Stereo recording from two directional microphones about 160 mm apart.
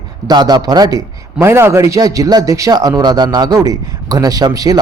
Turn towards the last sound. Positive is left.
turn(degrees=-25)  # may be behind; listen again after turning